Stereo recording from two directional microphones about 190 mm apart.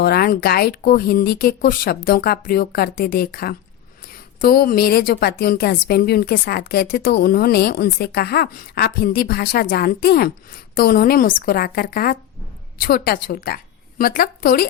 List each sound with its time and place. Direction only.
0.0 s a woman's voice: 50° left (ahead or behind)